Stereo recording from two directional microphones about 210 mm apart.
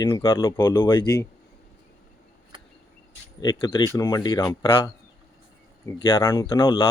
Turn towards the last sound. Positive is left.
turn(degrees=15)  # may be behind; listen again after turning